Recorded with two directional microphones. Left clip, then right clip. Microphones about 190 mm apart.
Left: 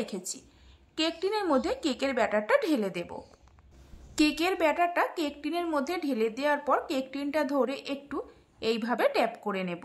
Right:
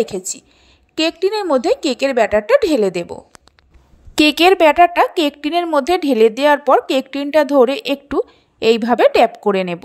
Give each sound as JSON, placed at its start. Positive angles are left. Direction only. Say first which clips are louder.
{"t": 0.0, "sound": "a woman's voice", "louder": "right 16 dB", "side_deg": -35}
{"t": 4.1, "sound": "a woman's voice", "louder": "right 16 dB", "side_deg": -45}